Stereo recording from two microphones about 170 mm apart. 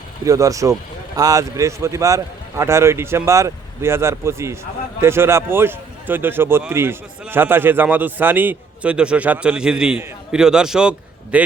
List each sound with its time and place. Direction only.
0.3 s a man's voice: 20° right (ahead or behind)